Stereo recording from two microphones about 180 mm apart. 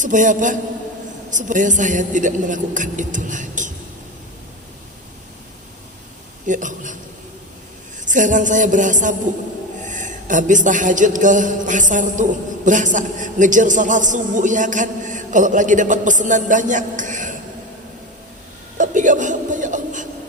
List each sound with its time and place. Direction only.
0.0 s speech: 45° right (ahead or behind)
6.4 s speech: 45° right (ahead or behind)
8.0 s speech: 45° right (ahead or behind)
18.8 s a sound: 45° right (ahead or behind)